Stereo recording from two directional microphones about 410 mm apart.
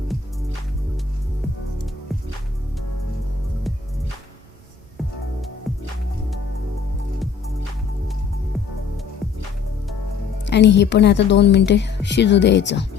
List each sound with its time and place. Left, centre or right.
10.4 s a woman's voice: left